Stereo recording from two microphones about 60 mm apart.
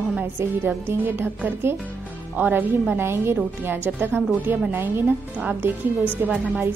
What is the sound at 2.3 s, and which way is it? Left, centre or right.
A woman's voice, right.